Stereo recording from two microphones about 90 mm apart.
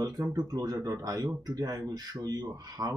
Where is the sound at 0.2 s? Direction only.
40° right (ahead or behind).